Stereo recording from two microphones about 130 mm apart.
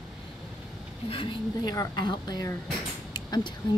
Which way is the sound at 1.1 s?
45° left (ahead or behind).